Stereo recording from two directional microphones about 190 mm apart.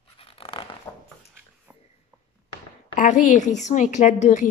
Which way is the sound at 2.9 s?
40° left (ahead or behind).